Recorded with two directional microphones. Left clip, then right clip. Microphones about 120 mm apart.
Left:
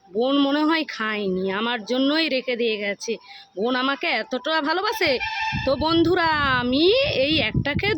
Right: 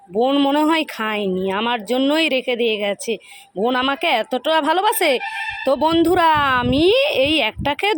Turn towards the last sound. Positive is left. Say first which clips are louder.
# right 4 dB
turn(degrees=-15)  # may be behind; listen again after turning